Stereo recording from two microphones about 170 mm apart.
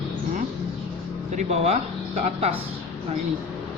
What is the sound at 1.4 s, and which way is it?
Speech, 35° right (ahead or behind).